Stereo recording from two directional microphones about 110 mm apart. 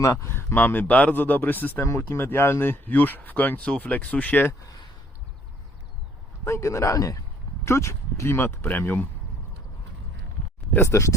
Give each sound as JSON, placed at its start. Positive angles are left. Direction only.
{"t": 0.0, "sound": "speech", "side_deg": 25}
{"t": 6.4, "sound": "speech", "side_deg": 25}
{"t": 10.8, "sound": "speech", "side_deg": 25}